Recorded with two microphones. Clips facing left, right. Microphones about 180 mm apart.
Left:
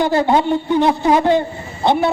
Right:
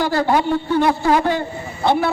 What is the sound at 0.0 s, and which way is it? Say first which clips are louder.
A man's voice: left 3 dB; 20° left (ahead or behind).